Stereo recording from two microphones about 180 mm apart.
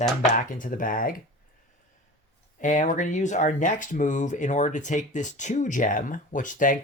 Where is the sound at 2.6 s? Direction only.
45° left (ahead or behind).